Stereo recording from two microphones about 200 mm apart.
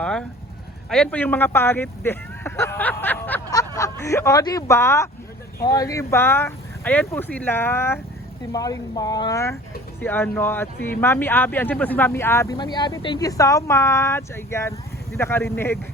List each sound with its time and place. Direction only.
0.0 s speech: 5° left (ahead or behind)